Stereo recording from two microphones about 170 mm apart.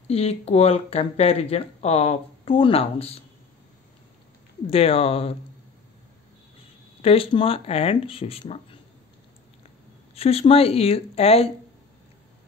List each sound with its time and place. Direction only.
0.1 s speech: 35° left (ahead or behind)
4.6 s speech: 35° left (ahead or behind)
7.0 s speech: 35° left (ahead or behind)
10.1 s speech: 35° left (ahead or behind)